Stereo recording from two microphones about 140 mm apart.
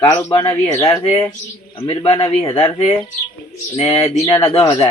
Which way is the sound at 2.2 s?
25° left (ahead or behind).